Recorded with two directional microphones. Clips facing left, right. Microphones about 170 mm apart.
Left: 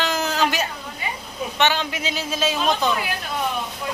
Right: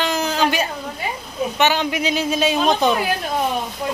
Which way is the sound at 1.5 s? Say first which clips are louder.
Right 3 dB; 10° right (ahead or behind).